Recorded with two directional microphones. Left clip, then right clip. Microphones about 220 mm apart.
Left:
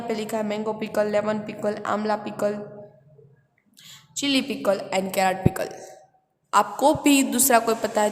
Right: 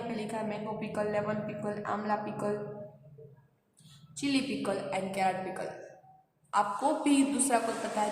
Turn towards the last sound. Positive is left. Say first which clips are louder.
# left 10 dB
turn(degrees=50)  # may be behind; listen again after turning